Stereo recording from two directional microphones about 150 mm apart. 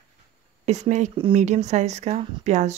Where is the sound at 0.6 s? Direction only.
50° right (ahead or behind).